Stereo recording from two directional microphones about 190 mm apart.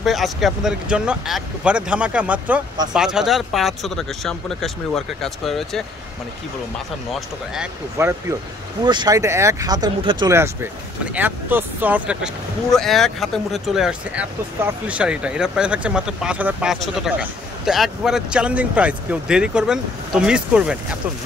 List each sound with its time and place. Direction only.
0.0 s speech: centre (ahead or behind)
7.1 s speech: 5° right (ahead or behind)
8.0 s speech: 15° right (ahead or behind)